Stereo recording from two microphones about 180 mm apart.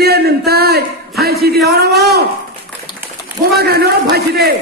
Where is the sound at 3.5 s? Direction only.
65° right (ahead or behind).